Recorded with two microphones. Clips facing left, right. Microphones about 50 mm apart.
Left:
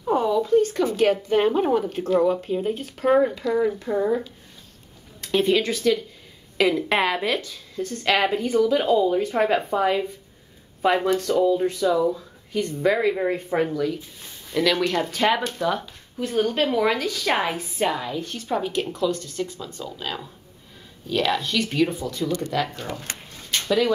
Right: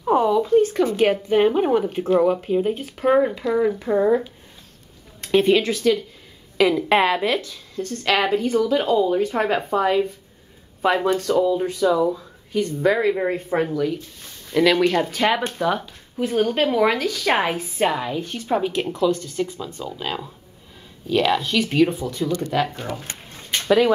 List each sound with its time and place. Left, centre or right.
0.0 s a sound: right
0.8 s speech: right
5.7 s a woman's voice: centre
7.7 s a woman's voice: centre
8.9 s a woman's voice: centre
15.0 s speech: centre
15.5 s speech: centre
17.3 s a woman's voice: right
18.9 s speech: centre